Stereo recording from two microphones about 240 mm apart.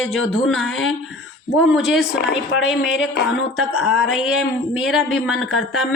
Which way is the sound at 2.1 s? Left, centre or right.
Left.